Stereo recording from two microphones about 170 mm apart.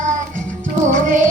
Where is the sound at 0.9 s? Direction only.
50° right (ahead or behind).